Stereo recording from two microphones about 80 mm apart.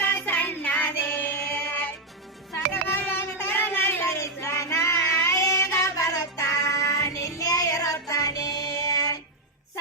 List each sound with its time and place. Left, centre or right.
0.0 s music: left
2.8 s child singing: left
8.0 s music: left